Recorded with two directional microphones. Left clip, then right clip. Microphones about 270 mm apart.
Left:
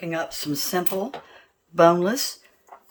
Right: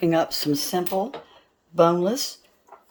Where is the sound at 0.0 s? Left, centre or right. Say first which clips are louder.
Right 7 dB; right.